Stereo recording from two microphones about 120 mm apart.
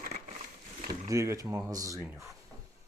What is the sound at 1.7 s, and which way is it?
Speech, 30° right (ahead or behind).